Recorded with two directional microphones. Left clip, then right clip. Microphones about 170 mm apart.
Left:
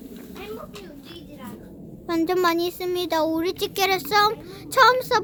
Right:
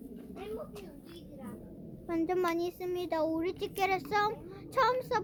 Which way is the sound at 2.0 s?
20° left (ahead or behind).